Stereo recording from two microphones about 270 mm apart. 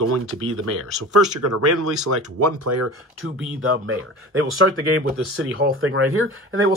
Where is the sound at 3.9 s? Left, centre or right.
Right.